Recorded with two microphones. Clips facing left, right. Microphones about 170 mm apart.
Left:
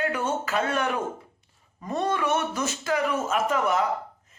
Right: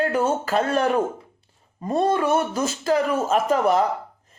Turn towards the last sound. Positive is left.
turn(degrees=-35)  # may be behind; listen again after turning